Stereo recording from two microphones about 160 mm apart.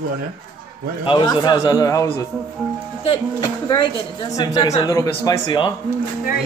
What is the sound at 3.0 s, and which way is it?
A woman's voice, 30° left (ahead or behind).